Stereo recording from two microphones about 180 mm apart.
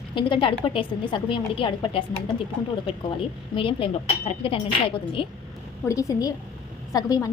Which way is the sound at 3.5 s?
30° left (ahead or behind).